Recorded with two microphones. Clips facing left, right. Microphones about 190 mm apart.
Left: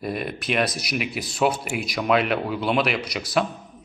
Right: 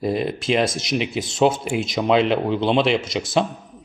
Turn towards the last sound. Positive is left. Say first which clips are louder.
# right 3 dB
turn(degrees=-25)  # may be behind; listen again after turning